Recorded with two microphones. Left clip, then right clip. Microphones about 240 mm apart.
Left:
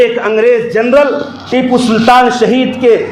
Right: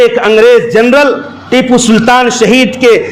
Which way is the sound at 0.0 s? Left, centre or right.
Right.